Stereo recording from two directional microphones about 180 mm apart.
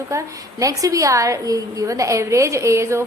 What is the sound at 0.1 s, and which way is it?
A woman's voice, 15° right (ahead or behind).